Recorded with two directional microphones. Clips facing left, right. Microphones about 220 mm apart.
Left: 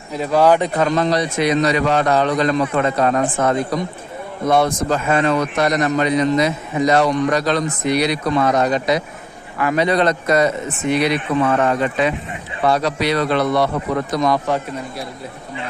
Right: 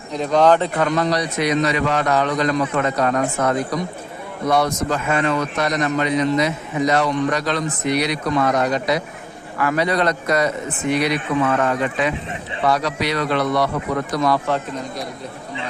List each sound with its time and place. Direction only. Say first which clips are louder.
0.1 s a man's voice: left 1 dB; 5° left (ahead or behind); by 3.2 s 25° left (ahead or behind)
4.4 s a man's voice: left 2 dB; 25° left (ahead or behind)